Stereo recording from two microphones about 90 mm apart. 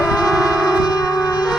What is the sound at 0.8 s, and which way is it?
Shofar, 45° left (ahead or behind).